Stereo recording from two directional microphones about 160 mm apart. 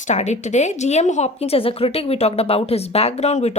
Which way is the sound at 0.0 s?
45° left (ahead or behind).